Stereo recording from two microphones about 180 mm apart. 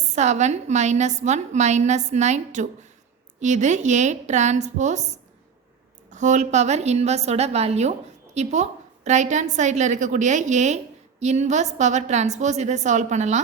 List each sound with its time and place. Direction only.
0.1 s a woman's voice: 40° right (ahead or behind)